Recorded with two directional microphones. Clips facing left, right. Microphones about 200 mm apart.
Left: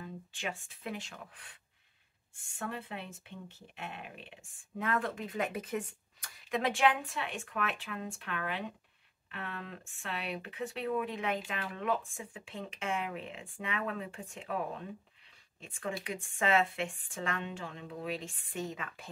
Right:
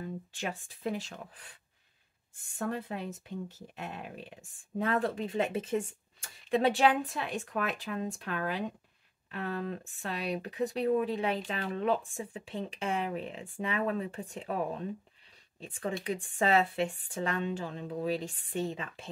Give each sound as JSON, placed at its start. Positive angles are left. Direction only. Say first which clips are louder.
{"t": 0.0, "sound": "speech", "louder": "right 4 dB", "side_deg": -40}